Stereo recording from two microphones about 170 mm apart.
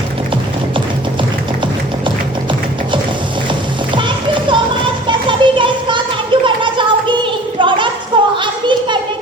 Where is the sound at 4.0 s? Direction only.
30° right (ahead or behind).